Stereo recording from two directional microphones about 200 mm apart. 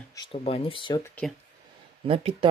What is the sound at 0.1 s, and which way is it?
Speech, 20° left (ahead or behind).